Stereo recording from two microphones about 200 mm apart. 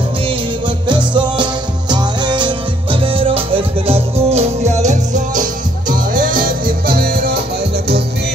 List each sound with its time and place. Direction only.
0.8 s music: 25° right (ahead or behind); by 7.3 s 50° right (ahead or behind)